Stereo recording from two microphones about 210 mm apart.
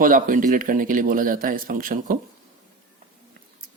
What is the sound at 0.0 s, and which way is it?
Speech, 40° right (ahead or behind).